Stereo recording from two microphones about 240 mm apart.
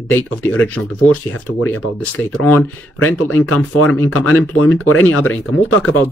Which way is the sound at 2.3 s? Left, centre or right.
Left.